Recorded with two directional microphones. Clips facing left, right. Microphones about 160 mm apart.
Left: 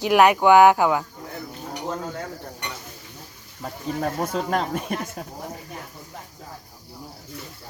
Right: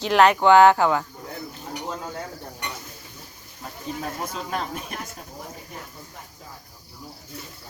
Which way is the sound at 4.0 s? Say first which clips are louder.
Left 8 dB; 55° left (ahead or behind).